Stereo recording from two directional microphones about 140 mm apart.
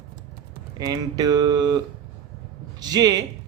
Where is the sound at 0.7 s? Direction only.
25° right (ahead or behind).